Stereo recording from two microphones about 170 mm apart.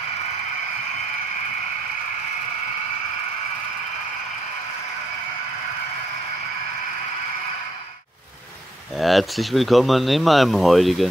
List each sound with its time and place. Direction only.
8.9 s speech: centre (ahead or behind)